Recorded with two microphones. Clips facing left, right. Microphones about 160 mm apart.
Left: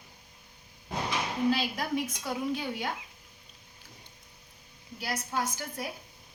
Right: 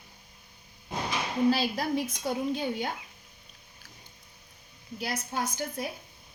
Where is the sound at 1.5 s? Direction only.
35° right (ahead or behind).